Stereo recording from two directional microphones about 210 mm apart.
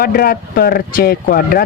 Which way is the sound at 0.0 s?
45° left (ahead or behind).